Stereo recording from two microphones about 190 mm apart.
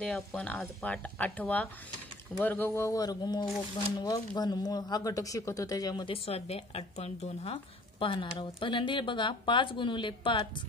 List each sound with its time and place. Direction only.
0.0 s speech: 5° left (ahead or behind); by 10.5 s 25° left (ahead or behind)